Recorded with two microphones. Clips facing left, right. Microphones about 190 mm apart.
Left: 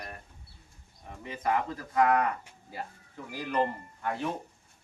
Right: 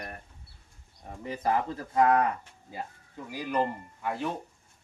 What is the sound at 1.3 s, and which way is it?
Speech, 30° right (ahead or behind).